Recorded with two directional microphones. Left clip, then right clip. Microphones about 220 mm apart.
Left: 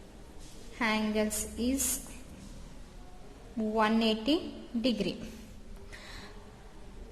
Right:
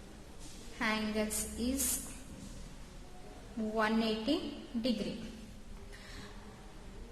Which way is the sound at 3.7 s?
20° left (ahead or behind).